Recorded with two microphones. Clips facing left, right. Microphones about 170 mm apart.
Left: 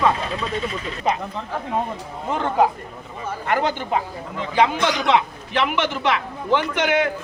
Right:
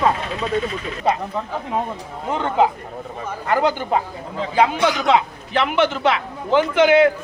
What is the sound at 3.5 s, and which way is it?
Speech, 35° right (ahead or behind).